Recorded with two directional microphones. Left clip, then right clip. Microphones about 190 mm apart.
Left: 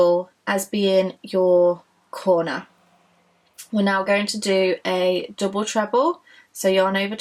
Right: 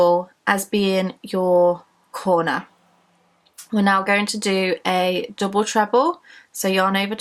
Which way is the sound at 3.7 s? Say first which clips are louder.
Right 2 dB; 30° right (ahead or behind).